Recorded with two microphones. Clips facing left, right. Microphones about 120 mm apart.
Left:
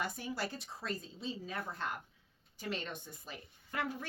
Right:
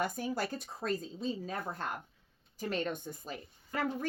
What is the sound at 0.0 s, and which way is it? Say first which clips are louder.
Speech: right 5 dB; 45° right (ahead or behind).